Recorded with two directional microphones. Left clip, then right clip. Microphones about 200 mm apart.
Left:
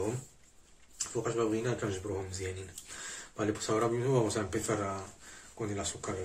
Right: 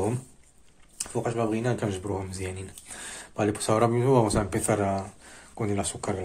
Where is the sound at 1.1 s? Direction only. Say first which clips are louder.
Right 4 dB; 50° right (ahead or behind).